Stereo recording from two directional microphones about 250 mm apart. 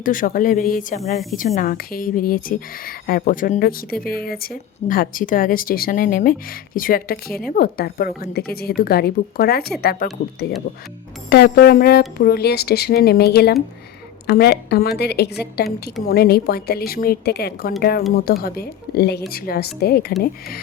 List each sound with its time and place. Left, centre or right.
0.0 s speech: left
11.3 s speech: left